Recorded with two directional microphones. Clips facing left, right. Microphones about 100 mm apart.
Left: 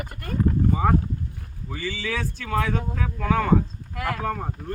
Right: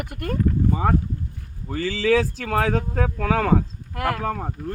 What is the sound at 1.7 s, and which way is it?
Speech, 90° right.